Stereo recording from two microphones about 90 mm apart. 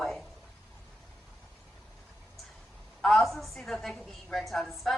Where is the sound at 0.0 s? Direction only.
Centre (ahead or behind).